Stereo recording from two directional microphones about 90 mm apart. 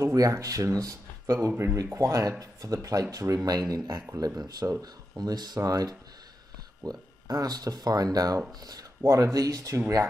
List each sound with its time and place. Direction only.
0.0 s speech: 35° right (ahead or behind)